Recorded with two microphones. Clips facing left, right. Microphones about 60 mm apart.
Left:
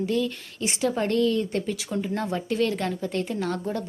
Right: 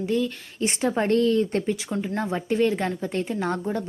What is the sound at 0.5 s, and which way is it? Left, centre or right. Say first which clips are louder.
Speech: right 2 dB; right.